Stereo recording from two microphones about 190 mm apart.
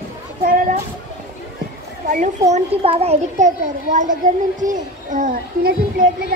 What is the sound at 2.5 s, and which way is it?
A child's voice, 30° right (ahead or behind).